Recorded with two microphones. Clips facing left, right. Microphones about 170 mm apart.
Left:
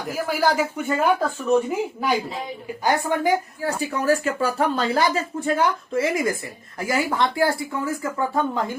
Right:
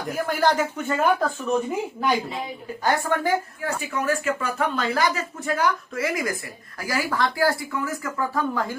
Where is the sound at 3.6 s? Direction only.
35° left (ahead or behind).